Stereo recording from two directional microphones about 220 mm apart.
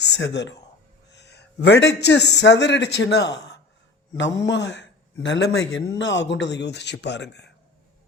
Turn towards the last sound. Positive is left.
turn(degrees=50)  # may be behind; listen again after turning